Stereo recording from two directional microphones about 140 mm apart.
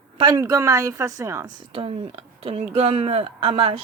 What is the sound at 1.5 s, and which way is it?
Speech, 40° right (ahead or behind).